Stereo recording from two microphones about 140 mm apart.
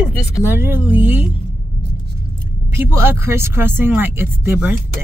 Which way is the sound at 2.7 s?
15° right (ahead or behind).